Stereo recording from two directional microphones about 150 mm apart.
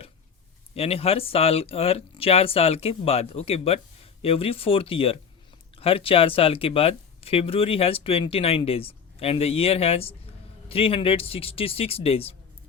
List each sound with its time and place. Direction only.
0.7 s speech: 40° left (ahead or behind)